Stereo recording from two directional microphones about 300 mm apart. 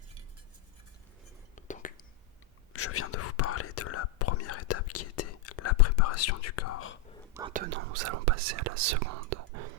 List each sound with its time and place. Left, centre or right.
1.5 s whispering: left
2.7 s whispering: left
7.5 s speech: right